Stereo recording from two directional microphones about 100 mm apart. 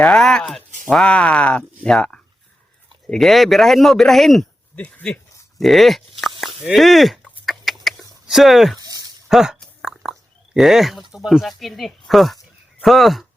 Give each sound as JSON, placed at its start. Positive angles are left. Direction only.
{"t": 0.0, "sound": "a man's voice", "side_deg": 5}
{"t": 4.8, "sound": "speech", "side_deg": 15}
{"t": 5.5, "sound": "a man's voice", "side_deg": 0}
{"t": 7.4, "sound": "chicken", "side_deg": 0}
{"t": 8.3, "sound": "a man's voice", "side_deg": 0}
{"t": 8.8, "sound": "a sound", "side_deg": -40}
{"t": 9.3, "sound": "a sound", "side_deg": -5}
{"t": 11.1, "sound": "a man's voice", "side_deg": -5}